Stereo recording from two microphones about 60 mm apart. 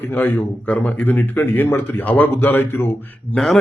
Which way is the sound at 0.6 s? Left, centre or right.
Left.